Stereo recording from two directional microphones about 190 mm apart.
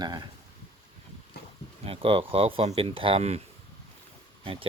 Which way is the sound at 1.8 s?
30° right (ahead or behind).